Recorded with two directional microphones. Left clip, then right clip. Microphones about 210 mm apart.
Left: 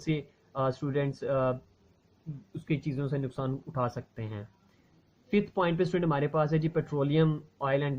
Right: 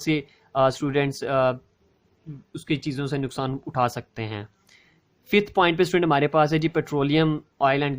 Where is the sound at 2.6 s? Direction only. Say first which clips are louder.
Right 6 dB; 45° right (ahead or behind).